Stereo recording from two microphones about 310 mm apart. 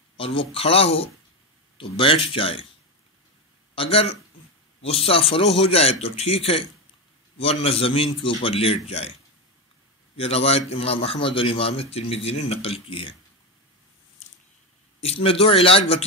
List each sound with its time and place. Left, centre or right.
0.2 s a man's voice: centre
3.7 s a man's voice: centre
10.1 s a man's voice: centre
15.0 s a man's voice: centre